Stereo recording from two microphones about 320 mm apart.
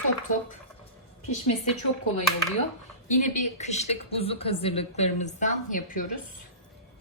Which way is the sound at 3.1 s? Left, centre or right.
Left.